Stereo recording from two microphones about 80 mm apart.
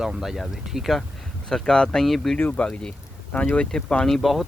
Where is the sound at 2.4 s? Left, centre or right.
Centre.